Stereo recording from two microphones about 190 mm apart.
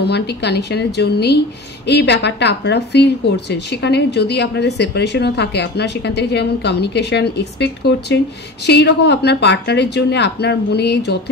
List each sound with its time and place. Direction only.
0.0 s a woman's voice: 60° left (ahead or behind)